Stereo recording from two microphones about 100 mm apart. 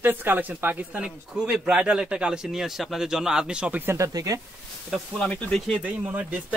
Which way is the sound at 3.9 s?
35° right (ahead or behind).